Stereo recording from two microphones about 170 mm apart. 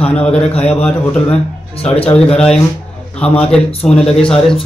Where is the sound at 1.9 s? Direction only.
35° left (ahead or behind).